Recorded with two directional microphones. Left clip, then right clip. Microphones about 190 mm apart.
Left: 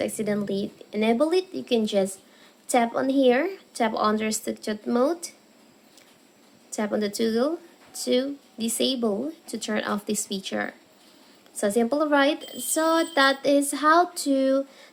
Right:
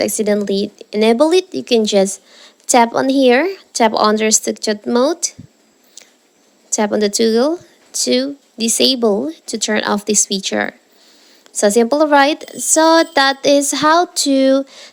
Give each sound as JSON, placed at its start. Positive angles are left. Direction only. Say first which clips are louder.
{"t": 0.0, "sound": "speech", "louder": "right 11 dB", "side_deg": -40}
{"t": 6.7, "sound": "speech", "louder": "right 11 dB", "side_deg": -45}